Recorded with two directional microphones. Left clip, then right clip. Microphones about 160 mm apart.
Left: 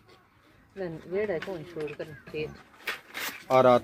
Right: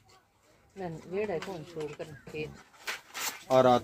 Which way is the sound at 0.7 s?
20° right (ahead or behind).